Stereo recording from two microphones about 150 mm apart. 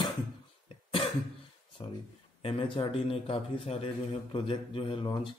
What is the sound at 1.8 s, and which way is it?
A man's voice, 30° left (ahead or behind).